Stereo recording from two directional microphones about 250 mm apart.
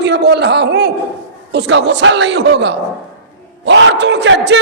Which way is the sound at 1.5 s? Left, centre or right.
Right.